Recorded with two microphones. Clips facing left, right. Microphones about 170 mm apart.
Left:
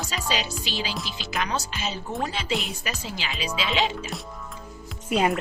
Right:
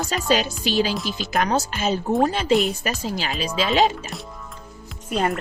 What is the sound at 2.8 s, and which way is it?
Speech, 45° right (ahead or behind).